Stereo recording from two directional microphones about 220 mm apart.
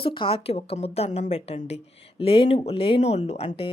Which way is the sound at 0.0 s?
25° left (ahead or behind).